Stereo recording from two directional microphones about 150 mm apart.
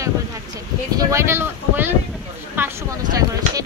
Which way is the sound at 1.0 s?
20° right (ahead or behind).